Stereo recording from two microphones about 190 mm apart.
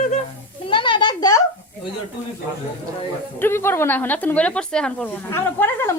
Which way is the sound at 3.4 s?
10° left (ahead or behind).